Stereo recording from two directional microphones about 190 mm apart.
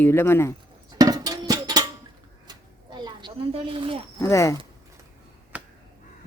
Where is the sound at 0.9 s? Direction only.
20° right (ahead or behind).